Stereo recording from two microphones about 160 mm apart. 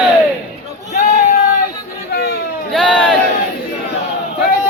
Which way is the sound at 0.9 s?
50° left (ahead or behind).